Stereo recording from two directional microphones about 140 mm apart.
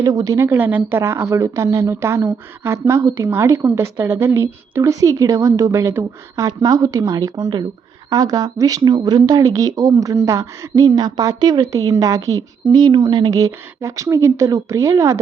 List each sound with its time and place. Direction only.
0.0 s a woman's voice: 25° right (ahead or behind)